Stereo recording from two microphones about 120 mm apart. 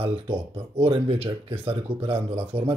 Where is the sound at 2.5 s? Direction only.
55° right (ahead or behind).